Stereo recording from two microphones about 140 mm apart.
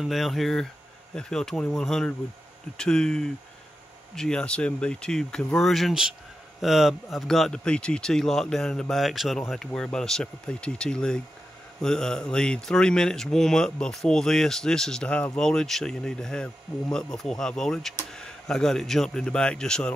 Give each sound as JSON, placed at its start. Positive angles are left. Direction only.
{"t": 0.0, "sound": "speech", "side_deg": 0}